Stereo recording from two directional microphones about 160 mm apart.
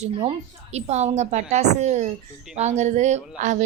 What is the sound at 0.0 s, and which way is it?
A woman's voice, 40° right (ahead or behind).